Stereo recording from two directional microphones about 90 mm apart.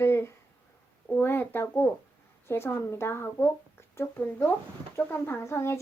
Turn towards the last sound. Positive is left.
turn(degrees=30)  # may be behind; listen again after turning